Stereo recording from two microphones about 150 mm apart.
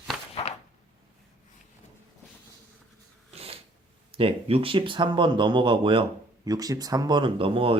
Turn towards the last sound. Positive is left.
turn(degrees=-35)  # may be behind; listen again after turning